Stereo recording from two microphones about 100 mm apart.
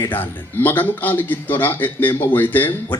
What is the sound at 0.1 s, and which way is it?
Speech, 20° left (ahead or behind).